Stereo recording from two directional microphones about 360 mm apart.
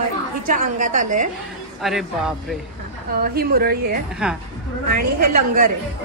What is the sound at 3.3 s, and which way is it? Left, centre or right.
Speech, right.